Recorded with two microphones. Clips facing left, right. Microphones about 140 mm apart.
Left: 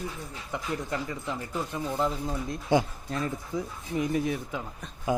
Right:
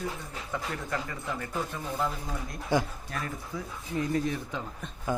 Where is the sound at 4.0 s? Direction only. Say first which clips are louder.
Left 1 dB; 15° left (ahead or behind).